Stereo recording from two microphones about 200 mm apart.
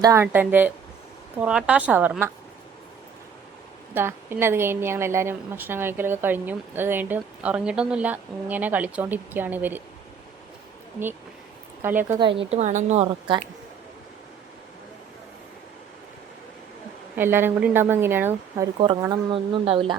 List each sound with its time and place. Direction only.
0.0 s a woman's voice: 15° right (ahead or behind)
3.9 s a woman's voice: 10° right (ahead or behind)
11.8 s a woman's voice: 10° right (ahead or behind)
12.2 s a woman's voice: 25° right (ahead or behind)
17.2 s a woman's voice: 10° right (ahead or behind); by 20.0 s 25° right (ahead or behind)